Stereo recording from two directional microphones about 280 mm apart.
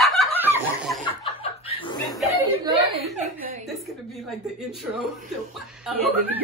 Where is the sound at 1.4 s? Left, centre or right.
Left.